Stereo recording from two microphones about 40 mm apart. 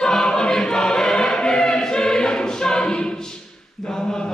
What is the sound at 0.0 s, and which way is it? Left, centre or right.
Choir, centre.